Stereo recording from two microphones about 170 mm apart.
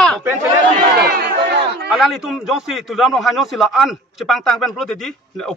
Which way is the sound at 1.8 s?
Centre (ahead or behind).